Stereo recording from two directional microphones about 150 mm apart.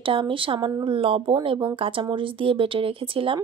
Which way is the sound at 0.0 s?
35° right (ahead or behind).